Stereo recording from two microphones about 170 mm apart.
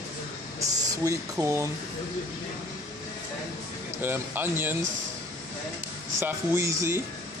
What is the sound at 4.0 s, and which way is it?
Speech, 10° right (ahead or behind).